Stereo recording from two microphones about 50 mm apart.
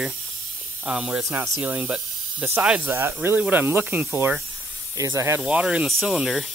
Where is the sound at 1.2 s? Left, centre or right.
Right.